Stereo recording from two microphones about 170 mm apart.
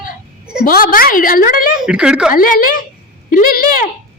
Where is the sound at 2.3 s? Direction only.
55° left (ahead or behind).